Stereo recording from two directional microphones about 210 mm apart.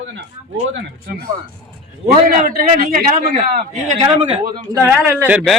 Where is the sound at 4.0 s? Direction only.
30° right (ahead or behind).